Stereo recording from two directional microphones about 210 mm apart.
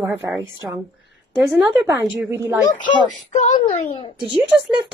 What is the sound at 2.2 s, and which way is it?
Speech, 10° right (ahead or behind).